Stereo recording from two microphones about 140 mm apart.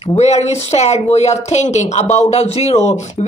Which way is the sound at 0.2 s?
50° left (ahead or behind).